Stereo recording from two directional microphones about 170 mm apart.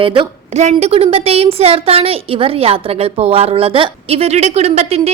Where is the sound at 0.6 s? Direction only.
40° right (ahead or behind).